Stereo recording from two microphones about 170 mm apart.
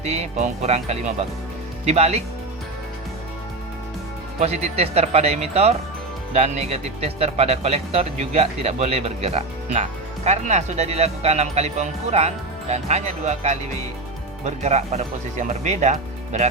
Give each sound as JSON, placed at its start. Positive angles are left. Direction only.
{"t": 0.0, "sound": "speech", "side_deg": -40}
{"t": 4.4, "sound": "speech", "side_deg": -40}